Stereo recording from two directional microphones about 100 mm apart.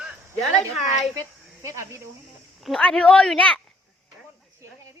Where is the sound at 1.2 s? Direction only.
30° right (ahead or behind).